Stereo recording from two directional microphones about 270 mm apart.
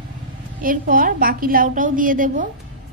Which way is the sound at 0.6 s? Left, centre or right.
Right.